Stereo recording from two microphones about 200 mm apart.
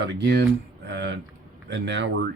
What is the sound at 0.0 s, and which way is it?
A man's voice, 60° right (ahead or behind).